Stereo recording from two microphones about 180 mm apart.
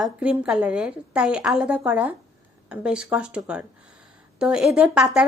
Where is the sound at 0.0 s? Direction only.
5° right (ahead or behind).